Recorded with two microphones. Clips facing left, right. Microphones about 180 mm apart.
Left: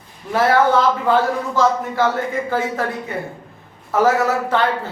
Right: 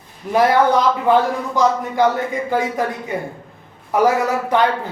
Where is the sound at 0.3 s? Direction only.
15° right (ahead or behind).